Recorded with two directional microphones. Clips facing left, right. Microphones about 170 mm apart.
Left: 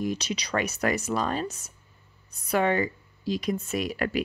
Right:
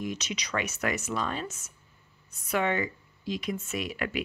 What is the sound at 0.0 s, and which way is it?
Speech, 35° left (ahead or behind).